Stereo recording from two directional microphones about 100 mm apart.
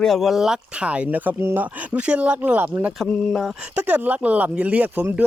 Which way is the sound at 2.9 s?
5° left (ahead or behind).